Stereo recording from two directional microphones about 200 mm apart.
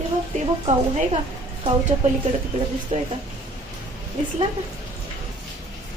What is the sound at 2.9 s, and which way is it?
Speech, 35° right (ahead or behind).